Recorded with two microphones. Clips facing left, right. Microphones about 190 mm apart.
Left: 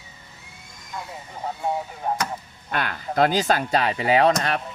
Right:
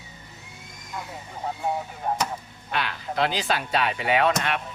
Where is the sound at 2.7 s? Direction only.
50° left (ahead or behind).